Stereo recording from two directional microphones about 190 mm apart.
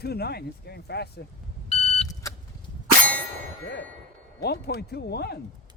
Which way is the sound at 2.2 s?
15° left (ahead or behind).